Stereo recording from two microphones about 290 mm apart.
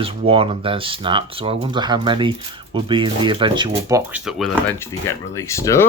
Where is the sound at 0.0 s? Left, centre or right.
Centre.